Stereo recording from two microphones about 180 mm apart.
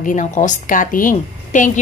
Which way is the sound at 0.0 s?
45° left (ahead or behind).